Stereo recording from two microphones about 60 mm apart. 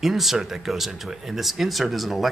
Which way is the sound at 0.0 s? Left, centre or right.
Centre.